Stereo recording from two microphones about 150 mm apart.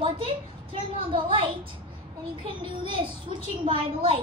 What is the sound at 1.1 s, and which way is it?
A woman's voice, 35° right (ahead or behind).